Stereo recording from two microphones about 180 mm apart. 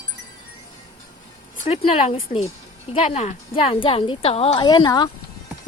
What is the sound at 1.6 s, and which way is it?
A woman's voice, 40° left (ahead or behind).